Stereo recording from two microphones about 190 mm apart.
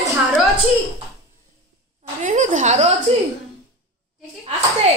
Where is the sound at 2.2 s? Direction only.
40° right (ahead or behind).